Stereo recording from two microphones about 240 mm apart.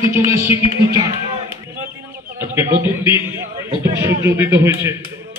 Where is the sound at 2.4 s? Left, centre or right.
Centre.